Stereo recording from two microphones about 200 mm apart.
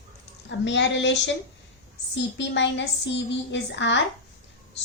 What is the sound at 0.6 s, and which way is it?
Speech, 65° left (ahead or behind).